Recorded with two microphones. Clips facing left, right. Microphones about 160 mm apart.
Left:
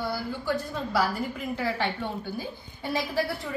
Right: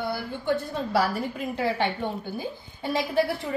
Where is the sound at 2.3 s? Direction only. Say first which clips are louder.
Right 2 dB; 20° right (ahead or behind).